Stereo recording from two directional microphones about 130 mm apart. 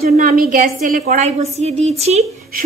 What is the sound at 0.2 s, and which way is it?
A woman's voice, 90° right.